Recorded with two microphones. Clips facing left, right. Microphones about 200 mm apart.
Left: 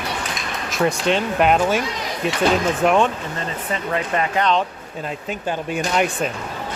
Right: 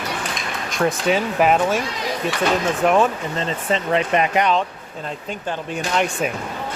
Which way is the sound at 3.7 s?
20° right (ahead or behind).